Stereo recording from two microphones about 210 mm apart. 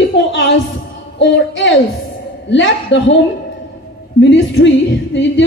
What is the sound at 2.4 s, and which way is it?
Speech, 60° left (ahead or behind).